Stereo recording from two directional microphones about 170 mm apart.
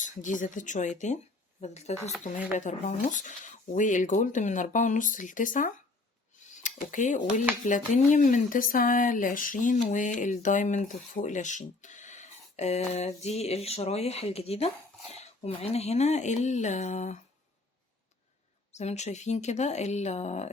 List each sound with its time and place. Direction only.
0.0 s speech: 45° left (ahead or behind)
18.7 s speech: 40° left (ahead or behind)